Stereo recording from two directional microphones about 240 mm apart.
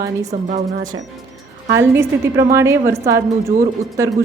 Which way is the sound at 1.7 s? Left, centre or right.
Centre.